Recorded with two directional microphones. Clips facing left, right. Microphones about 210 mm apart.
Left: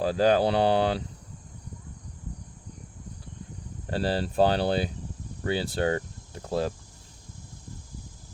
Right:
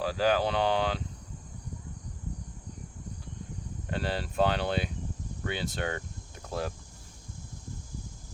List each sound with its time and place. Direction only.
0.0 s speech: 35° left (ahead or behind)
3.8 s speech: 35° left (ahead or behind)
5.4 s cricket: 35° left (ahead or behind)